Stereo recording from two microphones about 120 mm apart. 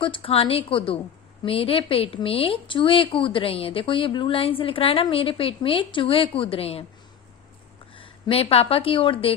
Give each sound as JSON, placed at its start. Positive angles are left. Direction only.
{"t": 0.0, "sound": "speech", "side_deg": 45}
{"t": 7.9, "sound": "speech", "side_deg": 50}